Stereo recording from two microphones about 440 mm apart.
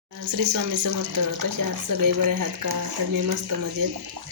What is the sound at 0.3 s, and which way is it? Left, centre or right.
Speech, right.